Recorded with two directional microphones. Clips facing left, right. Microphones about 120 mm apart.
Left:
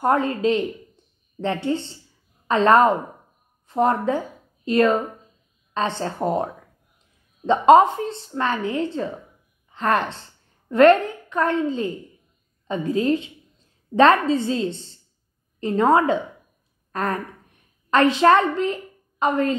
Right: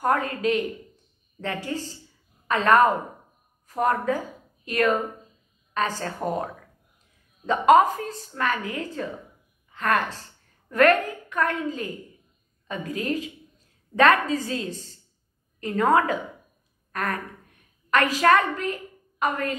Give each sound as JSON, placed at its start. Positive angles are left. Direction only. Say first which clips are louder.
{"t": 0.0, "sound": "a woman's voice", "louder": "left 4 dB", "side_deg": 25}